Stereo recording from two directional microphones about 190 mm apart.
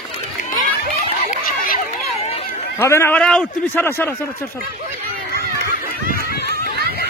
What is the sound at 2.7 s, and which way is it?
A man's voice, 15° left (ahead or behind).